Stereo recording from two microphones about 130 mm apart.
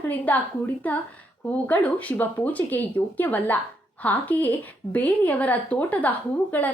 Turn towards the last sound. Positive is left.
turn(degrees=15)  # may be behind; listen again after turning